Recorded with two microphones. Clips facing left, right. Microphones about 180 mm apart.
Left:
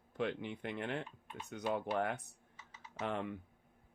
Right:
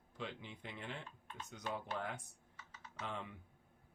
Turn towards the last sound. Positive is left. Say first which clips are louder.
# left 7 dB
turn(degrees=60)  # may be behind; listen again after turning